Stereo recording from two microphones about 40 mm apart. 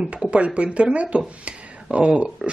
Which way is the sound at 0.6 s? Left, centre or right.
Right.